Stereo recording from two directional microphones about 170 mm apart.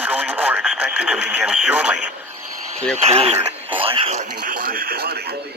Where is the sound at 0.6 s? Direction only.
Centre (ahead or behind).